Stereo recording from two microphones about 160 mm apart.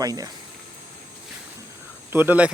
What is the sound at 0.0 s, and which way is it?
Speech, 25° right (ahead or behind).